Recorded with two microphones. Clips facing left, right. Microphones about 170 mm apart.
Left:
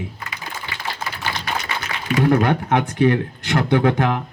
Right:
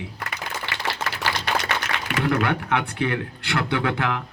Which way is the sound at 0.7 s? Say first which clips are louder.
Right 1 dB; 75° right (ahead or behind).